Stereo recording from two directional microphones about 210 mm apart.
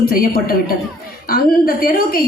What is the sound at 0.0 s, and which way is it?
A woman's voice, 45° left (ahead or behind).